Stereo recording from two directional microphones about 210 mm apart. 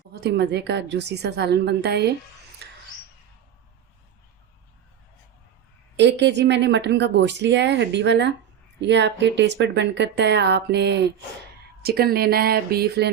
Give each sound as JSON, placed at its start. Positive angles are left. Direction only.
{"t": 0.1, "sound": "a woman's voice", "side_deg": -50}
{"t": 2.6, "sound": "a sound", "side_deg": -50}
{"t": 6.0, "sound": "a woman's voice", "side_deg": -55}